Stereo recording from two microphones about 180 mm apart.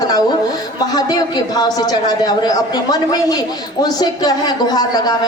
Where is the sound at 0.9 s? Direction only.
20° left (ahead or behind).